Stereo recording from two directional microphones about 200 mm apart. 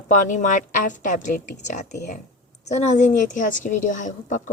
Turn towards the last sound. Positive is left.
turn(degrees=40)  # may be behind; listen again after turning